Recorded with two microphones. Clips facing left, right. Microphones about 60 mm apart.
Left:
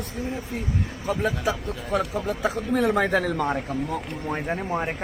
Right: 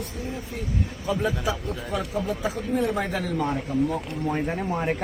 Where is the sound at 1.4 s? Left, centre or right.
Left.